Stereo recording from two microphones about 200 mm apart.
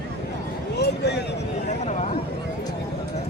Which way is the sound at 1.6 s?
35° left (ahead or behind).